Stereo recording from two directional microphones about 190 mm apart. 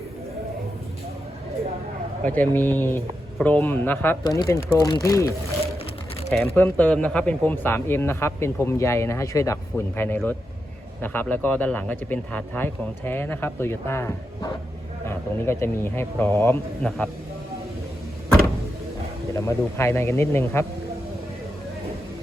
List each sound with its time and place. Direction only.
2.2 s speech: 10° left (ahead or behind)
6.6 s speech: 10° left (ahead or behind)
19.3 s speech: 15° left (ahead or behind)